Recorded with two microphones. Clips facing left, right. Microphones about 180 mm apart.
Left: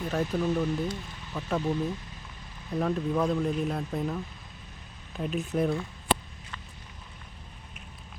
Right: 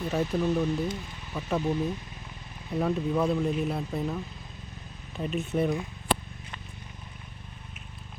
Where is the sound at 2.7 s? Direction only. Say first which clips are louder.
Right 1 dB; 5° right (ahead or behind).